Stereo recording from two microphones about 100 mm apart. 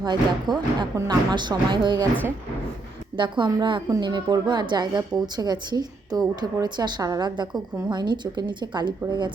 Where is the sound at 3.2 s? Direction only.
50° right (ahead or behind).